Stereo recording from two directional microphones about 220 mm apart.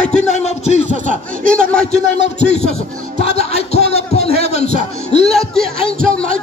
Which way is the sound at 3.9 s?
30° left (ahead or behind).